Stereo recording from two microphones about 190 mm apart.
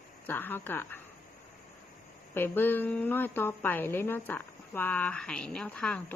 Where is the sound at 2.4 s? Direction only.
10° left (ahead or behind).